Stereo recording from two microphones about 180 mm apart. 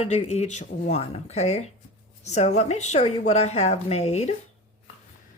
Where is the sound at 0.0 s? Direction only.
35° left (ahead or behind).